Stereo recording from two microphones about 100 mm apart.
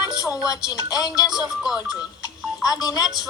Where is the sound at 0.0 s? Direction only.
35° left (ahead or behind).